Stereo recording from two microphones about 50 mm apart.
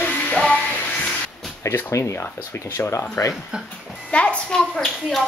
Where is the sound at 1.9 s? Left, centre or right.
Left.